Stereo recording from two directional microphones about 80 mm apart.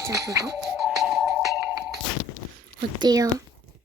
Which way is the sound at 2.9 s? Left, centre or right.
Right.